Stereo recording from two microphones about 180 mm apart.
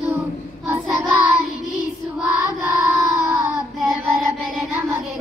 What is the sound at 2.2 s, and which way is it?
Speech, 10° right (ahead or behind).